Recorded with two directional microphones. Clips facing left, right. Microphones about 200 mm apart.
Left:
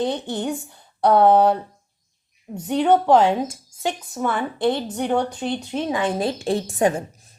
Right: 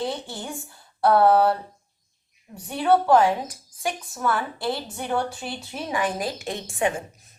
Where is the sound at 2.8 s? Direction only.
20° left (ahead or behind).